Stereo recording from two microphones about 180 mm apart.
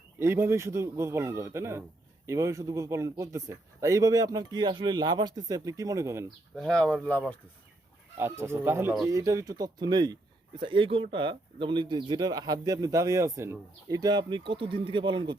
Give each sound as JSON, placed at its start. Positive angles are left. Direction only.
{"t": 0.2, "sound": "speech", "side_deg": -15}
{"t": 6.6, "sound": "speech", "side_deg": 5}
{"t": 8.2, "sound": "speech", "side_deg": -15}